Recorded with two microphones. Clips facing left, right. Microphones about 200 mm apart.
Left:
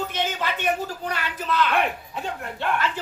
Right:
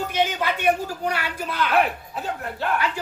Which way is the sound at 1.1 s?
10° right (ahead or behind).